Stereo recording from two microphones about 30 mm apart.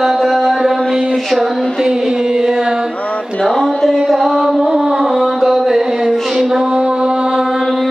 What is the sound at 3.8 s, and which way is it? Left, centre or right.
Music, centre.